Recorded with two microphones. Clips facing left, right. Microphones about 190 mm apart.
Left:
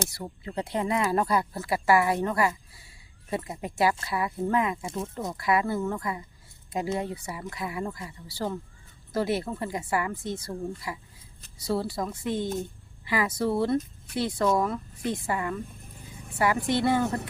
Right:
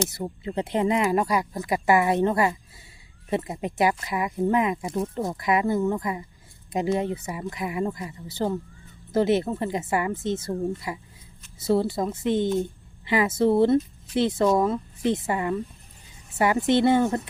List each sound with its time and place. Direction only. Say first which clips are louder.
0.1 s speech: right 6 dB; 20° right (ahead or behind)
16.0 s a sound: left 10 dB; 55° left (ahead or behind)
16.4 s speech: right 4 dB; 25° right (ahead or behind)